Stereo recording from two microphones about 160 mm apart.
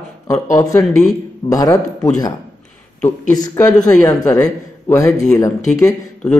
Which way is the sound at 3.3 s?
25° left (ahead or behind).